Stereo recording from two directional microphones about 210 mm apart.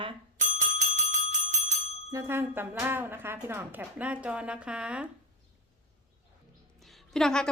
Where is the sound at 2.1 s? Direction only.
10° right (ahead or behind).